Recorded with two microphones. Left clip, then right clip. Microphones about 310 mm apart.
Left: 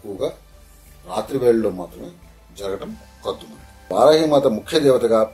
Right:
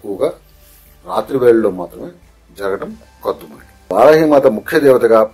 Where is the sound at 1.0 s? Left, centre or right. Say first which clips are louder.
Right 6 dB; centre.